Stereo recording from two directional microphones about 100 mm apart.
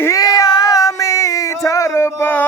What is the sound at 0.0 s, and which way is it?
Cat, 35° left (ahead or behind).